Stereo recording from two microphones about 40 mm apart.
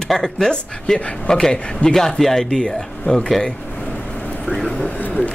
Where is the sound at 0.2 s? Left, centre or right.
Centre.